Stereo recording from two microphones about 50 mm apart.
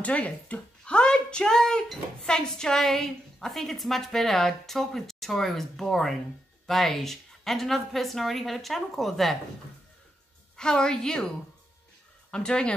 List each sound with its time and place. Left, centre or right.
0.0 s a woman's voice: left; by 9.4 s centre
10.5 s a woman's voice: centre
12.3 s speech: centre